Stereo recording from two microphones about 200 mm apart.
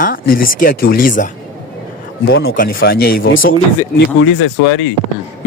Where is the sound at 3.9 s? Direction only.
65° left (ahead or behind).